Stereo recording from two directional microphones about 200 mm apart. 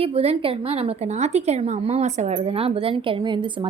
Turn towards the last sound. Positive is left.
turn(degrees=-25)  # may be behind; listen again after turning